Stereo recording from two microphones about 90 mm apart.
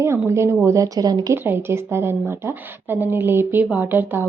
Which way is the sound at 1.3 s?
25° right (ahead or behind).